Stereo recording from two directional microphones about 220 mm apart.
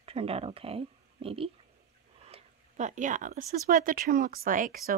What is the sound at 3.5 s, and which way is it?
Speech, 40° right (ahead or behind).